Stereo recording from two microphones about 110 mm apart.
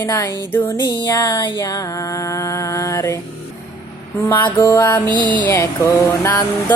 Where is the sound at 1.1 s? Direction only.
30° left (ahead or behind).